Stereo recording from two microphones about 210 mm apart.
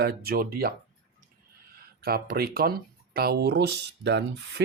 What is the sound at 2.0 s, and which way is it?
Speech, 45° right (ahead or behind).